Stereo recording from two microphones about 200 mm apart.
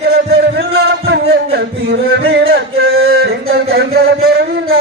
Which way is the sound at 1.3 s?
55° right (ahead or behind).